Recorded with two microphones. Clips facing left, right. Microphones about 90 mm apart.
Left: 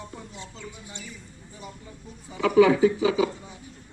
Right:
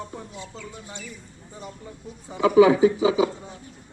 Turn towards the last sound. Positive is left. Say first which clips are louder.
# right 2 dB
turn(degrees=-20)  # may be behind; listen again after turning